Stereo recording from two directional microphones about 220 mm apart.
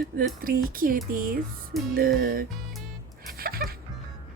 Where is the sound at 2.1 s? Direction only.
40° right (ahead or behind).